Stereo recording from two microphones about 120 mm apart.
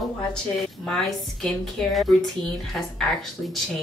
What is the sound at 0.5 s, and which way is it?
A woman's voice, 5° left (ahead or behind).